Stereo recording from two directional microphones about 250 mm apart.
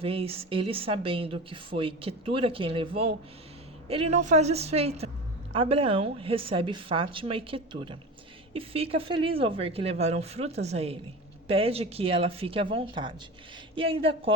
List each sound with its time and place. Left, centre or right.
0.0 s a woman's voice: right